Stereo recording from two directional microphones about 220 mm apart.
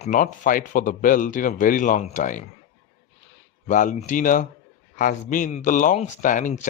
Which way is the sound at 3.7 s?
35° left (ahead or behind).